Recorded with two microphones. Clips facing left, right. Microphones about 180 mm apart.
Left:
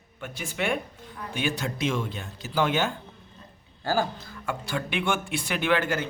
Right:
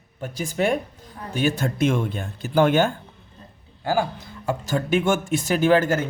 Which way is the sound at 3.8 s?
15° right (ahead or behind).